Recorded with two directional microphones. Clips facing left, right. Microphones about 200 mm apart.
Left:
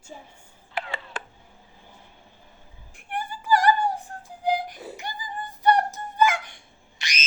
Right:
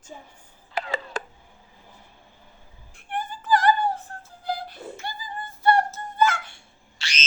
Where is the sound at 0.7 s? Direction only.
40° right (ahead or behind).